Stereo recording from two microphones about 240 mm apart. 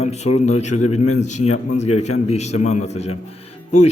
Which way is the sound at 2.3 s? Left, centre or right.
Left.